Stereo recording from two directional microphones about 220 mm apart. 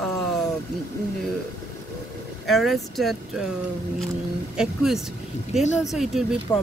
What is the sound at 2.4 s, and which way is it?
Speech, centre (ahead or behind).